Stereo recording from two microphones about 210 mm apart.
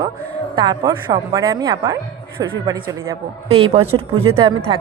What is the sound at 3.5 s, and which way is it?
A woman's voice, 30° right (ahead or behind).